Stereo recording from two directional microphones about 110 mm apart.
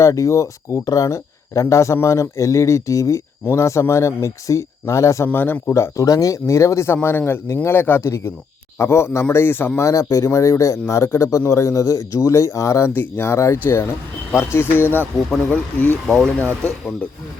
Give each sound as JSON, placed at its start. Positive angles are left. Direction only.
{"t": 0.0, "sound": "speech", "side_deg": 30}